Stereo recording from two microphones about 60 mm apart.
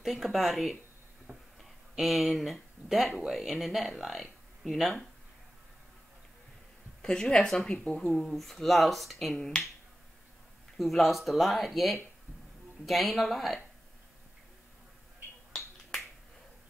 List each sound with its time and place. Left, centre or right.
0.0 s speech: centre
2.0 s speech: centre
7.0 s a woman's voice: centre
8.0 s speech: centre
10.8 s speech: centre
15.5 s finger snapping: centre